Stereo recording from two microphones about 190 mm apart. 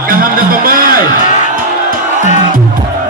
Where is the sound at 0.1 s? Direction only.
50° right (ahead or behind).